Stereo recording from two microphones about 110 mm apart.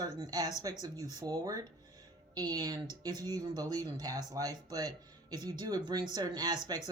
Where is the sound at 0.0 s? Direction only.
35° right (ahead or behind).